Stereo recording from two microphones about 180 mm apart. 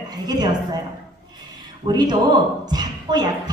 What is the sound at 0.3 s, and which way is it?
Speech, 20° right (ahead or behind).